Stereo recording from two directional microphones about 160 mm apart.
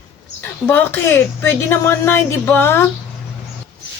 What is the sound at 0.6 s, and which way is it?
A woman's voice, 15° left (ahead or behind).